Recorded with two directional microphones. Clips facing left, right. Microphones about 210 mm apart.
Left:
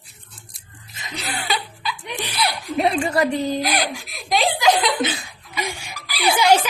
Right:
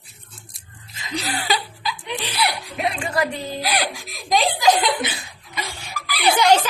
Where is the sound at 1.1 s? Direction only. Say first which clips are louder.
Right 2 dB; 35° right (ahead or behind).